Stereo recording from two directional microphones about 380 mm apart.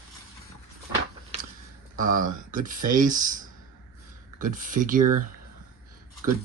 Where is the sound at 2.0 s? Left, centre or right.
Right.